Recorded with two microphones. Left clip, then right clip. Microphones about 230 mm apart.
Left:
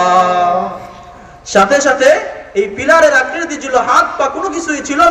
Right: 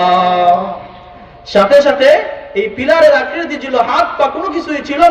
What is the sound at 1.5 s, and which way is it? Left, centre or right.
A man's voice, right.